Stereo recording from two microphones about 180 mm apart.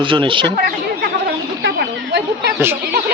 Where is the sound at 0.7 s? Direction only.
60° right (ahead or behind).